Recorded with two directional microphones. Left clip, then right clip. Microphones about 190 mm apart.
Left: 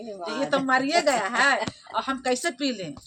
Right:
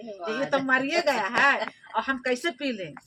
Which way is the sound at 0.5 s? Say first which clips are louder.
Left 2 dB; 20° right (ahead or behind).